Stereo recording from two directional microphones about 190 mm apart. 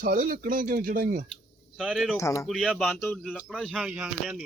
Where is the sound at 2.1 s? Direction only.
15° left (ahead or behind).